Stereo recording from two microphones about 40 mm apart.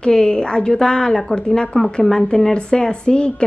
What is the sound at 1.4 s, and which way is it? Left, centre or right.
A woman's voice, left.